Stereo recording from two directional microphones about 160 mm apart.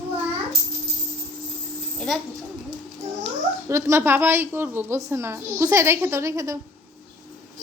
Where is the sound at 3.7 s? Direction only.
15° right (ahead or behind).